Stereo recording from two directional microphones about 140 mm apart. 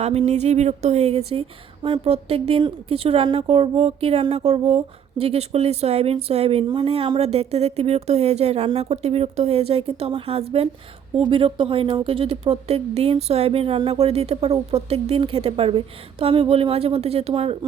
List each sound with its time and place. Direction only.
0.0 s a woman's voice: 50° right (ahead or behind)